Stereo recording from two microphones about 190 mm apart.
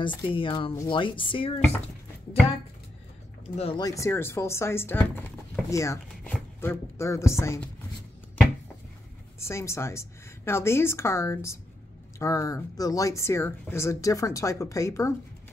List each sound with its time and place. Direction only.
0.0 s speech: 25° left (ahead or behind)
3.5 s speech: 30° left (ahead or behind)
3.8 s speech: 15° left (ahead or behind)
9.4 s speech: 15° left (ahead or behind)